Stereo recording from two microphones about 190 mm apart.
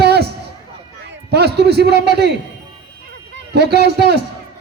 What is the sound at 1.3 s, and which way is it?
Speech, 60° right (ahead or behind).